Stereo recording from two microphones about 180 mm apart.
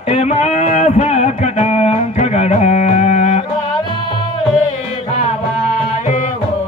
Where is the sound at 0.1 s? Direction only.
35° left (ahead or behind).